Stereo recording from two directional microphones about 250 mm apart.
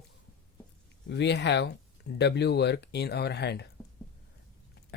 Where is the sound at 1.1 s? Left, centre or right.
Left.